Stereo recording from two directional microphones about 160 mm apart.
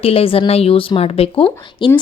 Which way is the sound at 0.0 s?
35° left (ahead or behind).